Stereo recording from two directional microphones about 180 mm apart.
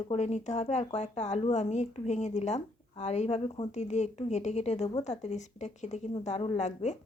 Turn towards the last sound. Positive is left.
turn(degrees=40)  # may be behind; listen again after turning